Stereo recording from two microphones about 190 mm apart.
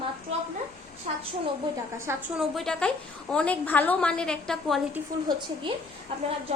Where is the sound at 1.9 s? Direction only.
15° right (ahead or behind).